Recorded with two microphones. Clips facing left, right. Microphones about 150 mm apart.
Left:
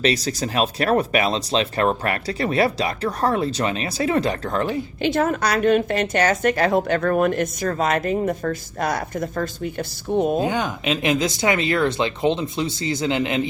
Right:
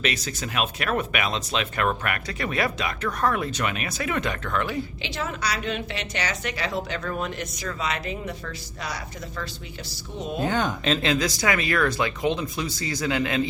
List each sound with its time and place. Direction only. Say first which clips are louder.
0.0 s speech: left 7 dB; 35° left (ahead or behind)
5.0 s a woman's voice: left 13 dB; 50° left (ahead or behind)
10.4 s speech: left 2 dB; 10° left (ahead or behind)